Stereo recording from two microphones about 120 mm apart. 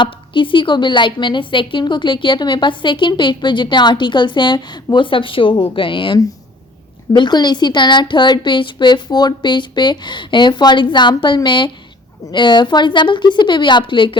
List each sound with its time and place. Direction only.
0.0 s a woman's voice: 45° left (ahead or behind)